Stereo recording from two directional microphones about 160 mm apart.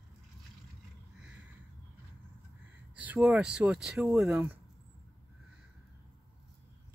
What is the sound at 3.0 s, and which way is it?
Speech, 10° right (ahead or behind).